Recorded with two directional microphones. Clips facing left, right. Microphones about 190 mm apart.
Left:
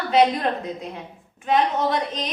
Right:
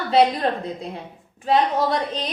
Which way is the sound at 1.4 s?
35° right (ahead or behind).